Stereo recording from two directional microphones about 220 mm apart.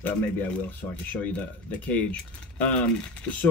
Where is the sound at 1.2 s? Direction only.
5° left (ahead or behind).